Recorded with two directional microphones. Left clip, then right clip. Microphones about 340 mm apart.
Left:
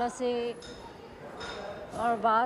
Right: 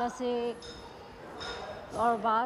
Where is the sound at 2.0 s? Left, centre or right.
Centre.